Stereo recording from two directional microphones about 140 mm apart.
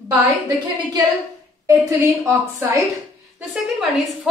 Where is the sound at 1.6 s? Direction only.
25° right (ahead or behind).